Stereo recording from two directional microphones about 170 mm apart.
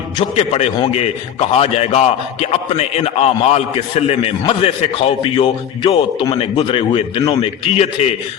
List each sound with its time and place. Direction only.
0.2 s a man's voice: 35° left (ahead or behind)